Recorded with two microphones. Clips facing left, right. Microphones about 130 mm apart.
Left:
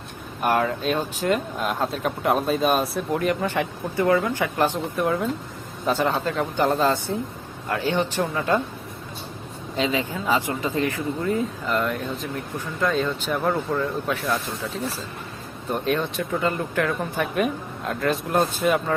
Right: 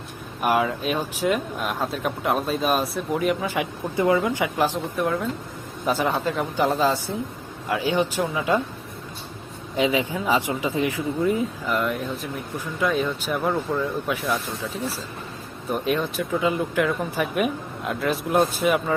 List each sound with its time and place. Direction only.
0.4 s speech: 5° right (ahead or behind)
4.5 s speech: centre (ahead or behind)
5.8 s speech: 10° right (ahead or behind)
9.7 s speech: 15° right (ahead or behind)
15.7 s speech: 5° right (ahead or behind)